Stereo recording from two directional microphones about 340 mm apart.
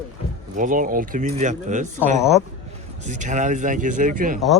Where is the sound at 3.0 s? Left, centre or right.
Right.